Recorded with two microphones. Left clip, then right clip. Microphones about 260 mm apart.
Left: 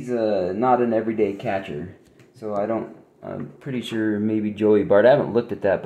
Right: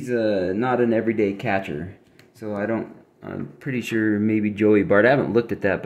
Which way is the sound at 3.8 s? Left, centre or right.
Right.